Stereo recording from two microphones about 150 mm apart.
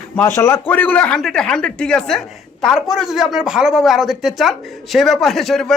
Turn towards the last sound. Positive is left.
turn(degrees=0)  # may be behind; listen again after turning